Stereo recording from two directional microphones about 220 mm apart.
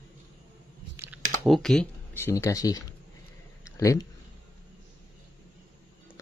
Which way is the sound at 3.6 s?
15° left (ahead or behind).